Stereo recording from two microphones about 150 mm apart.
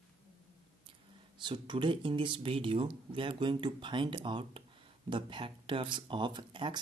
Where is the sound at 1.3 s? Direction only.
30° right (ahead or behind).